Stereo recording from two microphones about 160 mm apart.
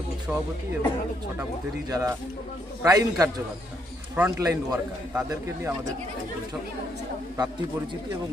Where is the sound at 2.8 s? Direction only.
20° right (ahead or behind).